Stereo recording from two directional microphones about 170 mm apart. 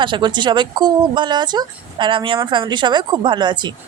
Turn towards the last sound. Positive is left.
turn(degrees=-25)  # may be behind; listen again after turning